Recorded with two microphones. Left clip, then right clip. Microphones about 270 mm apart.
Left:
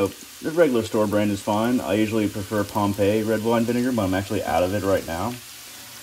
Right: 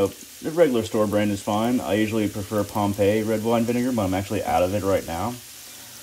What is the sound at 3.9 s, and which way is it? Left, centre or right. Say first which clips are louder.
Speech: left 1 dB; left.